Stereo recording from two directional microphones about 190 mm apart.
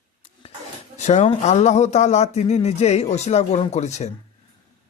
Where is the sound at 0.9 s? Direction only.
35° left (ahead or behind).